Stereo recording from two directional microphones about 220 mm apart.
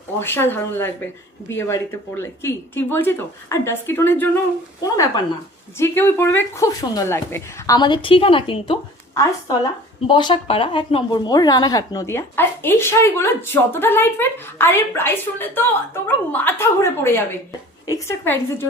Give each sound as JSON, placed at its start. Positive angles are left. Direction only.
{"t": 0.2, "sound": "a woman's voice", "side_deg": 10}
{"t": 10.1, "sound": "a woman's voice", "side_deg": 20}